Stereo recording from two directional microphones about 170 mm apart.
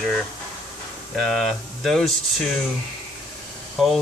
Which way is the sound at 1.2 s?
Centre (ahead or behind).